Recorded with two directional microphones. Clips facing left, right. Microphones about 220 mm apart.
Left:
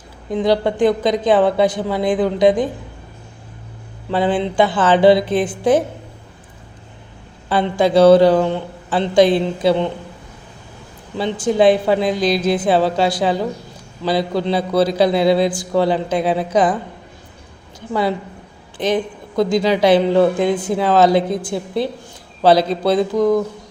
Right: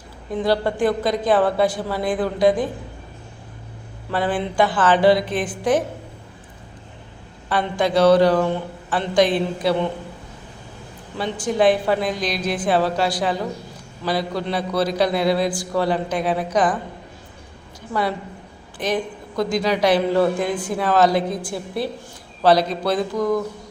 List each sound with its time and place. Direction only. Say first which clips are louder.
0.3 s a woman's voice: left 4 dB; 20° left (ahead or behind)
4.1 s a woman's voice: left 5 dB; 25° left (ahead or behind)
7.5 s a woman's voice: left 5 dB; 25° left (ahead or behind)
11.2 s a woman's voice: left 4 dB; 25° left (ahead or behind)
18.8 s a woman's voice: left 4 dB; 25° left (ahead or behind)